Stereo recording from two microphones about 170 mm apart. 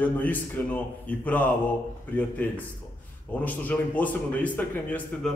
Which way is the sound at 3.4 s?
10° left (ahead or behind).